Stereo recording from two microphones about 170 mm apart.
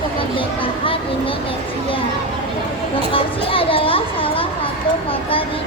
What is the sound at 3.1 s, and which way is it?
A child's voice, 30° left (ahead or behind).